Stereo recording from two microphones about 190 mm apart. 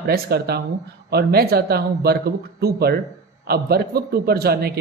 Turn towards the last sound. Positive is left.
turn(degrees=-55)  # may be behind; listen again after turning